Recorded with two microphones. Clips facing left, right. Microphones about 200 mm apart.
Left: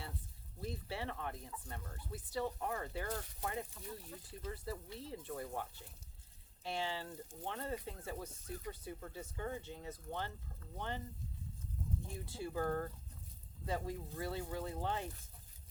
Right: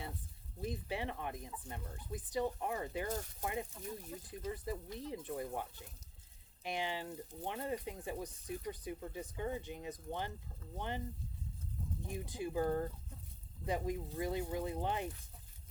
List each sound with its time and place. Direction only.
0.6 s speech: 15° right (ahead or behind)
12.0 s speech: 15° right (ahead or behind)